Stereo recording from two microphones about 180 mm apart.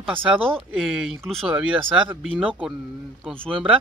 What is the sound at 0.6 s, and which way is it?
Speech, 5° right (ahead or behind).